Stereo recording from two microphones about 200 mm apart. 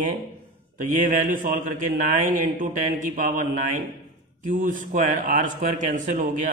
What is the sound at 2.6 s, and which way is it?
Speech, 40° right (ahead or behind).